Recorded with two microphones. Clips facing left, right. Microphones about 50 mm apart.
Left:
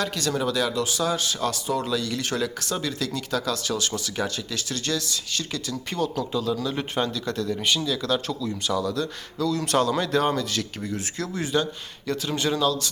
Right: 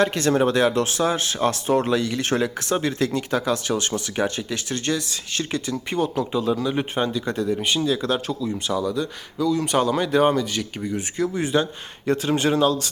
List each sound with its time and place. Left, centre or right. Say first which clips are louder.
0.0 s speech: right 7 dB; right; by 10.9 s centre
10.9 s speech: right 6 dB; right